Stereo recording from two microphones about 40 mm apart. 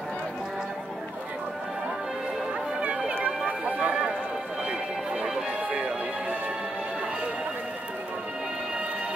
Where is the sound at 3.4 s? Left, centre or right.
Right.